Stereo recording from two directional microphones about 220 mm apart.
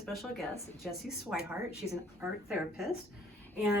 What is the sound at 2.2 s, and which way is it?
Speech, 5° right (ahead or behind).